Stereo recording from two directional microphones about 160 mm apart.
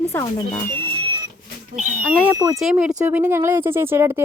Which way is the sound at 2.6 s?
5° right (ahead or behind).